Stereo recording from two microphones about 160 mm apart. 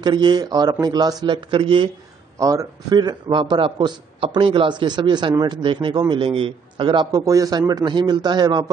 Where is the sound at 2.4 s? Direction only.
20° right (ahead or behind).